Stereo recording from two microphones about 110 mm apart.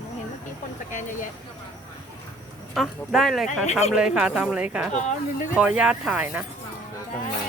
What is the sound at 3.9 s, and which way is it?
Speech, 10° right (ahead or behind).